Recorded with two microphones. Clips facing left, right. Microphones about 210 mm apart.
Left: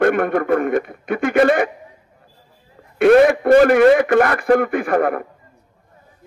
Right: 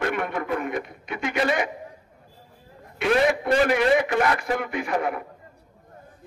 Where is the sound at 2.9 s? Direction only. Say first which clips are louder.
Left 10 dB; 55° left (ahead or behind).